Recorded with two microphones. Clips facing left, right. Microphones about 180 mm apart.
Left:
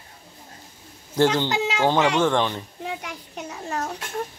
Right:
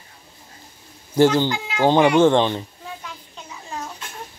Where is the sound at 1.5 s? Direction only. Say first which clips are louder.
Left 4 dB; 85° left.